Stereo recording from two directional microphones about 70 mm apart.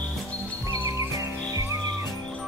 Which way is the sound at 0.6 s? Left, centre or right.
Right.